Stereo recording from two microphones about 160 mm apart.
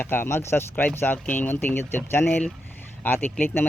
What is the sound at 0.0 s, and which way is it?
Speech, 15° left (ahead or behind).